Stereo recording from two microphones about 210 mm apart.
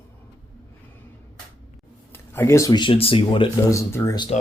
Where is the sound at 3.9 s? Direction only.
15° left (ahead or behind).